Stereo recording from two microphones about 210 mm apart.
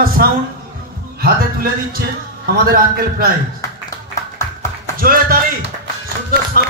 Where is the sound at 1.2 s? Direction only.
45° right (ahead or behind).